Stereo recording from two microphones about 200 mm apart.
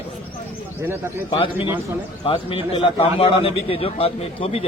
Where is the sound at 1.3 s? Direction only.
25° left (ahead or behind).